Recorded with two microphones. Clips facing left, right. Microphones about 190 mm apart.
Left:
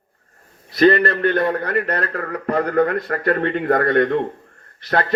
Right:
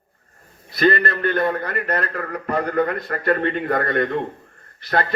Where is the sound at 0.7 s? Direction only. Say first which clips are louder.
Left 4 dB; 75° left (ahead or behind).